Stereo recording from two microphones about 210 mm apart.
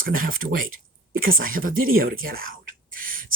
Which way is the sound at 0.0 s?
40° right (ahead or behind).